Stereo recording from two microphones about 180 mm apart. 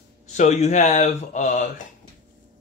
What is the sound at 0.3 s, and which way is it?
Speech, 40° left (ahead or behind).